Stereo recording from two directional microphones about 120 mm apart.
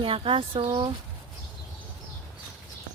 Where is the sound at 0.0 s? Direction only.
50° right (ahead or behind).